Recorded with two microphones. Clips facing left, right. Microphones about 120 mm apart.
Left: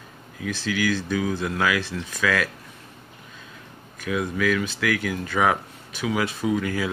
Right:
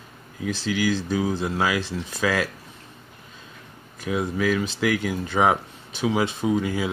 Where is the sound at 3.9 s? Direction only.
25° right (ahead or behind).